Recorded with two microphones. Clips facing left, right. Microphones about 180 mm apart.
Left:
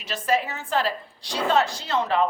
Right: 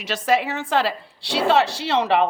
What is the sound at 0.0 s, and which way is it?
A woman's voice, 75° right (ahead or behind).